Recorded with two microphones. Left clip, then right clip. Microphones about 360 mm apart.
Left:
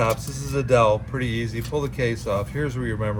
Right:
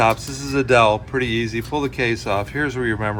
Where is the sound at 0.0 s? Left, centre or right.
Right.